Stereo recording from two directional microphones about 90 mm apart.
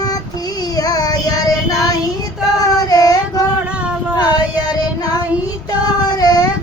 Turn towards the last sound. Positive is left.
turn(degrees=45)  # may be behind; listen again after turning